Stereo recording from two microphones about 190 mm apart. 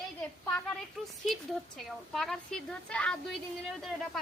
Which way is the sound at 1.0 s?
Centre (ahead or behind).